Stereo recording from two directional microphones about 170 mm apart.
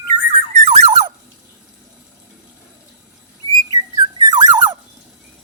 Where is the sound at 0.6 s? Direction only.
40° right (ahead or behind).